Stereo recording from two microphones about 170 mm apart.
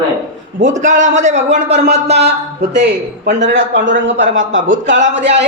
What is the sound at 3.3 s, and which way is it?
A woman's voice, 90° right.